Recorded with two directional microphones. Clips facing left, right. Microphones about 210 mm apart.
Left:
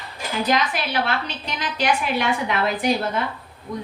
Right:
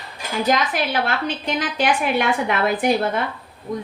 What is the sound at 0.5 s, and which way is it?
A woman's voice, 50° right (ahead or behind).